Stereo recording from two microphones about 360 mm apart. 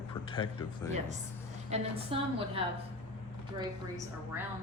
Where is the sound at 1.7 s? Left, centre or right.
Centre.